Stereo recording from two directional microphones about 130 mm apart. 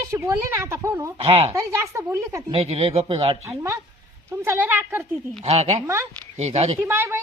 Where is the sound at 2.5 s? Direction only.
50° right (ahead or behind).